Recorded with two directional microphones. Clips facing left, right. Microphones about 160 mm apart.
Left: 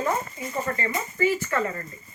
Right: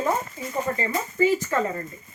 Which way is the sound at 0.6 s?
10° right (ahead or behind).